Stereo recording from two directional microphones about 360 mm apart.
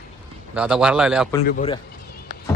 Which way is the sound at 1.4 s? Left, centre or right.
Left.